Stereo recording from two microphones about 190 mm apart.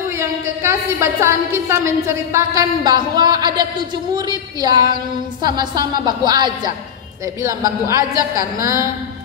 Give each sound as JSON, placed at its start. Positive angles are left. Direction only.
{"t": 0.2, "sound": "a woman's voice", "side_deg": -15}